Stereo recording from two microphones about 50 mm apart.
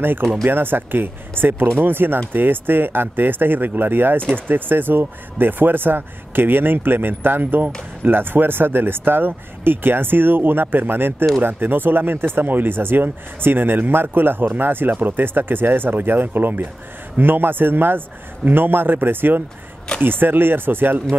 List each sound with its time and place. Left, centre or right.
0.0 s speech: right